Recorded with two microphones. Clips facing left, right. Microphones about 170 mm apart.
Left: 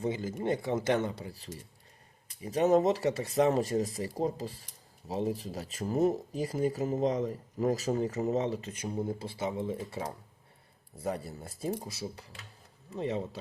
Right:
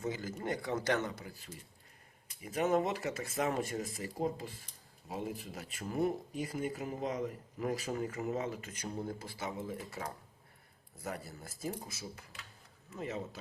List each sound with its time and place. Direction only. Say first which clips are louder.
0.0 s speech: left 6 dB; 25° left (ahead or behind)